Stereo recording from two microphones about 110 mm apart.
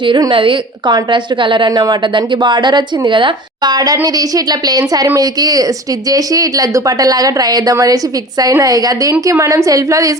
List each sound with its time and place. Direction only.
0.3 s a woman's voice: 50° right (ahead or behind); by 10.2 s 30° right (ahead or behind)